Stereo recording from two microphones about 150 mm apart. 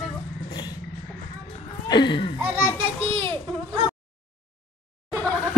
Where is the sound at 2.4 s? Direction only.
10° right (ahead or behind).